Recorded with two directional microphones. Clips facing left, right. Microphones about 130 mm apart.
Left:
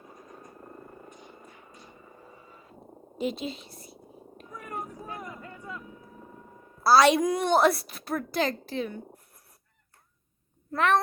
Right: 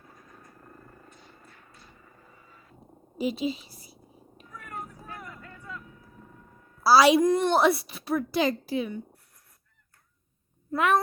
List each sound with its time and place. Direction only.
0.0 s vehicle: 20° left (ahead or behind)
3.2 s purr: 5° right (ahead or behind)
4.4 s a sound: 20° left (ahead or behind)
6.8 s a woman's voice: 5° right (ahead or behind)
10.7 s speech: 10° right (ahead or behind)